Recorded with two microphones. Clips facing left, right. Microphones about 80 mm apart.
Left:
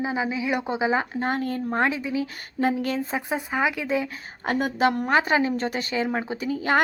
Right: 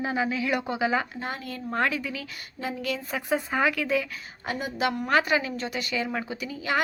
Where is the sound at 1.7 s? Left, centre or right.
Left.